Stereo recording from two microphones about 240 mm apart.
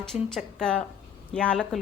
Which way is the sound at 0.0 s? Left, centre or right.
Centre.